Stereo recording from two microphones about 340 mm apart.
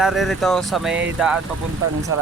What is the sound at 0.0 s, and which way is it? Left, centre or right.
Speech, centre.